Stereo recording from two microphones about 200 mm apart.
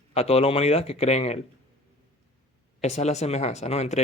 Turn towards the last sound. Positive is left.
turn(degrees=35)  # may be behind; listen again after turning